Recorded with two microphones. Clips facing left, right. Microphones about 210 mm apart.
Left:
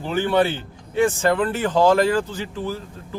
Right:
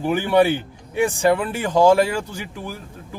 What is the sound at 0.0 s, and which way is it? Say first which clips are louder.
Speech: right 3 dB; 15° right (ahead or behind).